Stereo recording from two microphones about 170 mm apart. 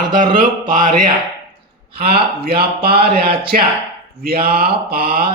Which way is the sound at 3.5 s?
50° right (ahead or behind).